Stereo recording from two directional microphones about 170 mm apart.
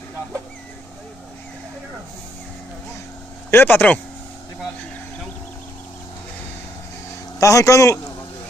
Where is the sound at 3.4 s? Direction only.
10° left (ahead or behind).